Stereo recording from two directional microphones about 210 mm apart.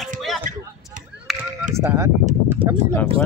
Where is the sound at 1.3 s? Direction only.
Centre (ahead or behind).